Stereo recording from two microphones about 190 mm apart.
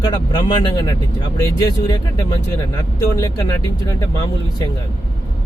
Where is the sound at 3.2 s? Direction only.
20° left (ahead or behind).